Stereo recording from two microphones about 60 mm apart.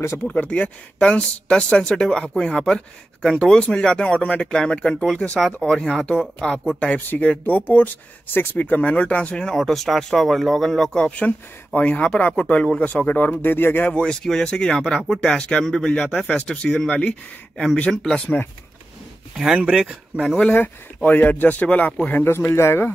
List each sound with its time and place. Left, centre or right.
0.3 s speech: left
9.6 s speech: centre; by 13.9 s left
13.9 s speech: centre
18.2 s speech: left
19.3 s speech: centre
20.4 s speech: left
22.2 s speech: left